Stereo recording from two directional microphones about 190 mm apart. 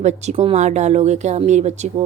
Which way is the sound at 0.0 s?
35° right (ahead or behind).